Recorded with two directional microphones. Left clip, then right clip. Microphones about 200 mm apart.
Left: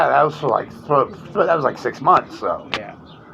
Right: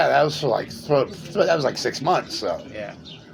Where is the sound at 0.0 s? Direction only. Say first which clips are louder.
Left 3 dB; 20° right (ahead or behind).